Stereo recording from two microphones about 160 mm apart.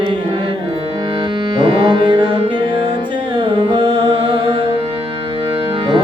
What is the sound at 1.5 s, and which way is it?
Music, 30° right (ahead or behind).